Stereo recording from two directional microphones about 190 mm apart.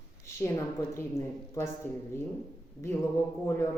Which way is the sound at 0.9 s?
15° left (ahead or behind).